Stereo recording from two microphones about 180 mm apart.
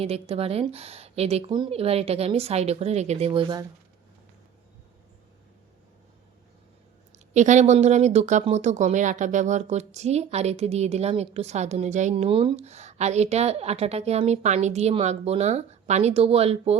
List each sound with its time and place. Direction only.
0.0 s speech: 35° right (ahead or behind)
7.1 s speech: 40° right (ahead or behind)